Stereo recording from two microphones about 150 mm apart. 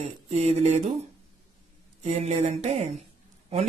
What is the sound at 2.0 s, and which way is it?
Speech, 45° right (ahead or behind).